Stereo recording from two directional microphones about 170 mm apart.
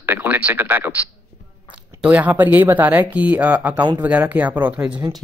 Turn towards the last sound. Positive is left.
turn(degrees=-10)  # may be behind; listen again after turning